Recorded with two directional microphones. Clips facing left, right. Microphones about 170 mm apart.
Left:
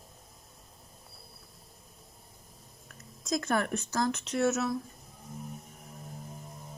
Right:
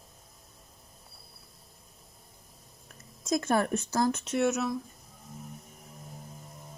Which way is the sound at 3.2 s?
25° right (ahead or behind).